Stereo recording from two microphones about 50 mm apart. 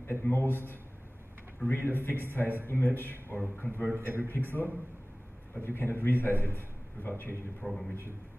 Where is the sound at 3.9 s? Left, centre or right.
Right.